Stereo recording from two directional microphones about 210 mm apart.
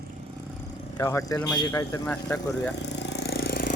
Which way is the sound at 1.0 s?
15° left (ahead or behind).